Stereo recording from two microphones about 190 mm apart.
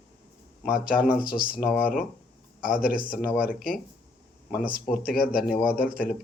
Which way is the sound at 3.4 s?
45° left (ahead or behind).